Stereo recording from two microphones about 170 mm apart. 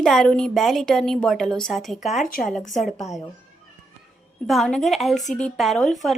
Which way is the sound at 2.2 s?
55° left (ahead or behind).